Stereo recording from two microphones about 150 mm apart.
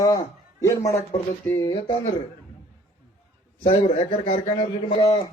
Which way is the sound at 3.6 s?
40° left (ahead or behind).